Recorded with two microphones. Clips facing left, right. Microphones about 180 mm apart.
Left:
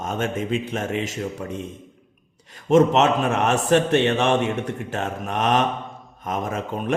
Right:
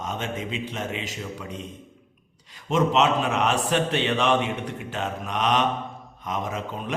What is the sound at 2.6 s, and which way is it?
Mantra, 50° left (ahead or behind).